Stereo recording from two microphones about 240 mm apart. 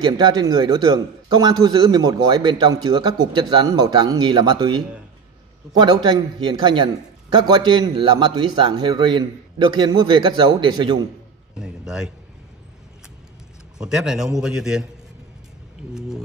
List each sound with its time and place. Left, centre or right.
0.0 s a man's voice: centre
11.6 s a sound: centre
13.7 s a man's voice: centre